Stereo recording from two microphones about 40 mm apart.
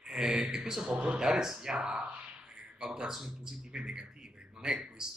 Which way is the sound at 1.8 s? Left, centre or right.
Right.